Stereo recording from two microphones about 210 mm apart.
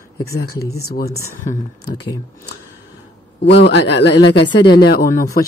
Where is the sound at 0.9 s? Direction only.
45° left (ahead or behind).